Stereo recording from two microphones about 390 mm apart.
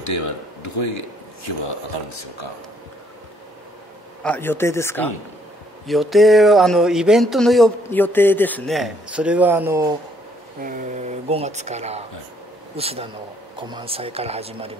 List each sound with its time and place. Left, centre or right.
0.0 s speech: left
4.2 s speech: centre
10.6 s speech: right